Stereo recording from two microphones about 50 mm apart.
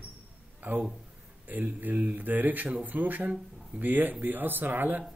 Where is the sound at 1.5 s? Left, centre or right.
Right.